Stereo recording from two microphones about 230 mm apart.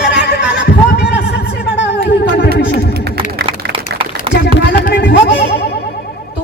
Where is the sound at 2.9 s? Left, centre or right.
Right.